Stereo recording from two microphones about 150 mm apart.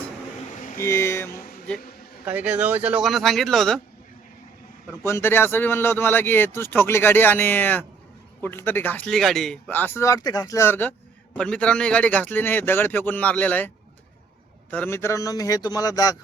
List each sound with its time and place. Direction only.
0.8 s a sound: 15° left (ahead or behind)
1.3 s speech: 75° left (ahead or behind)
2.2 s speech: 10° right (ahead or behind)
5.0 s a man's voice: 15° left (ahead or behind)
14.7 s a man's voice: 15° left (ahead or behind)